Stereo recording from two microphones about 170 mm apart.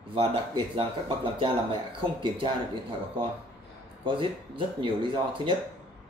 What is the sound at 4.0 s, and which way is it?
Speech, 30° right (ahead or behind).